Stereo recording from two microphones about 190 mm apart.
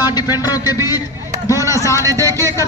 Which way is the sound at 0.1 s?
20° left (ahead or behind).